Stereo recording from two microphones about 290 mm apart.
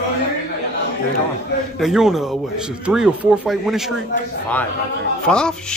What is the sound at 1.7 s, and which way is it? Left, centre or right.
A man's voice, centre.